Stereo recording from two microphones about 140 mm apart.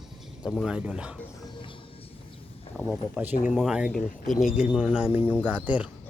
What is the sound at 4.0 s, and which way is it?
Speech, 75° left (ahead or behind).